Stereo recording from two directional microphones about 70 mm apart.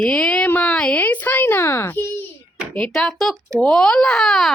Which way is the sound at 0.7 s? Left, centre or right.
Centre.